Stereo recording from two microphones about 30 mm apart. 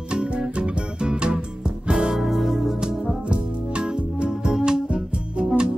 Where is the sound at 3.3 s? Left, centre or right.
Right.